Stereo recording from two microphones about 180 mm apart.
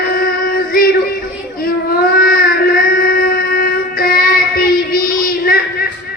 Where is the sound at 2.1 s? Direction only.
55° left (ahead or behind).